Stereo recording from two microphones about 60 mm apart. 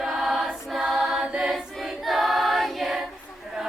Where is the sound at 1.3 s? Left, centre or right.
Centre.